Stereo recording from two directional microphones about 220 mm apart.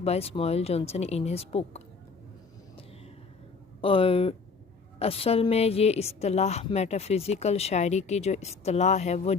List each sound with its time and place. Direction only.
0.0 s a woman's voice: 25° left (ahead or behind)
3.8 s a woman's voice: 25° left (ahead or behind)